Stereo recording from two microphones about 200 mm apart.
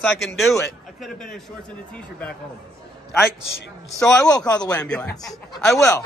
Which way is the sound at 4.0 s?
5° left (ahead or behind).